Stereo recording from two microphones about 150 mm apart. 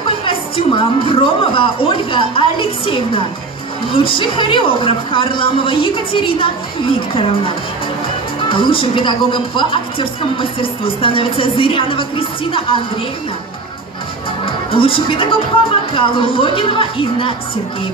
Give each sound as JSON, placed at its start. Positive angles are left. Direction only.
{"t": 0.2, "sound": "speech", "side_deg": 35}
{"t": 14.4, "sound": "speech", "side_deg": 35}